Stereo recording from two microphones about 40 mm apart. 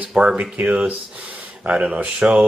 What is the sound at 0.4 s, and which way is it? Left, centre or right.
A man's voice, right.